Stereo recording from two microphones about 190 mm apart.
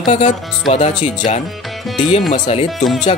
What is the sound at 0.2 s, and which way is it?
Speech, 40° left (ahead or behind).